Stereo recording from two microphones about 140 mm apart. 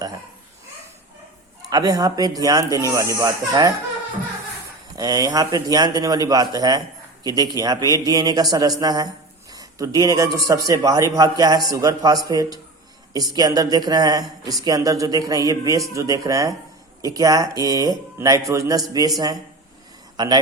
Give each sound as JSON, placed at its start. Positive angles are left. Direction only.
{"t": 1.7, "sound": "a man's voice", "side_deg": -25}
{"t": 4.9, "sound": "a man's voice", "side_deg": -25}